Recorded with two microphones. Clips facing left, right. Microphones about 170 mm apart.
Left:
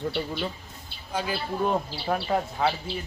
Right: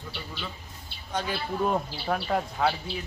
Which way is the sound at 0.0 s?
55° left (ahead or behind).